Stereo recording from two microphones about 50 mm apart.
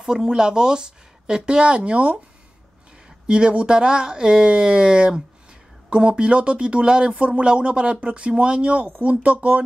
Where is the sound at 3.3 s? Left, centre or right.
Right.